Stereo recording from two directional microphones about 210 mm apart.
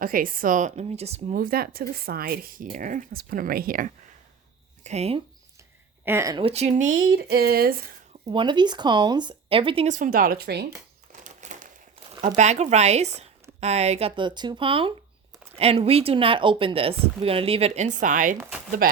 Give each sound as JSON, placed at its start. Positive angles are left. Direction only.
{"t": 0.0, "sound": "a woman's voice", "side_deg": -40}
{"t": 1.4, "sound": "a woman's voice", "side_deg": -45}
{"t": 6.1, "sound": "speech", "side_deg": -15}
{"t": 6.4, "sound": "speech", "side_deg": -30}
{"t": 8.3, "sound": "speech", "side_deg": -20}
{"t": 11.1, "sound": "crumpling", "side_deg": -35}
{"t": 12.2, "sound": "a woman's voice", "side_deg": -35}
{"t": 18.8, "sound": "chopping", "side_deg": -45}